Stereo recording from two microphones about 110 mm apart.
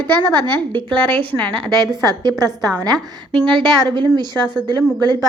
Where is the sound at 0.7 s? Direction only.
15° left (ahead or behind).